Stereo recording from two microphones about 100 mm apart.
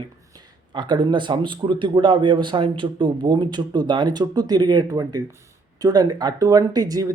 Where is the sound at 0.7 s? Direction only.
50° right (ahead or behind).